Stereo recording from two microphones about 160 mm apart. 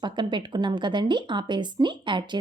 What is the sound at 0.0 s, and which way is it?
A woman's voice, 30° right (ahead or behind).